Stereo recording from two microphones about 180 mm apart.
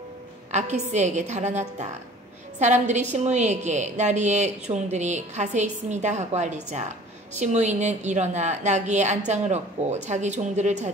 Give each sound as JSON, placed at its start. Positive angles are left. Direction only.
{"t": 0.5, "sound": "a woman's voice", "side_deg": -40}